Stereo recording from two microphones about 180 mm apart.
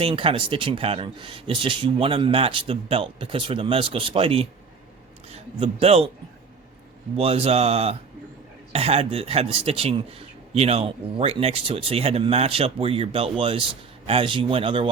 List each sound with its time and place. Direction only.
0.0 s a man's voice: 30° right (ahead or behind)
7.2 s a man's voice: 30° right (ahead or behind)